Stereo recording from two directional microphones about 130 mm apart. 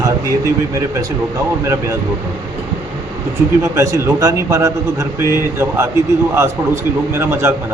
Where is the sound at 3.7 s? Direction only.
20° right (ahead or behind).